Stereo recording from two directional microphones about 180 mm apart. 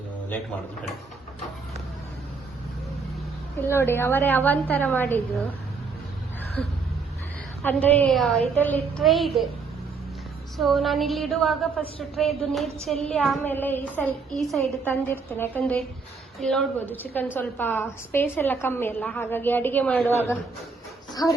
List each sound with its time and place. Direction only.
3.6 s a woman's voice: 15° left (ahead or behind)
6.6 s a woman's voice: 5° left (ahead or behind)
10.6 s a woman's voice: centre (ahead or behind)
21.1 s dog: 20° left (ahead or behind)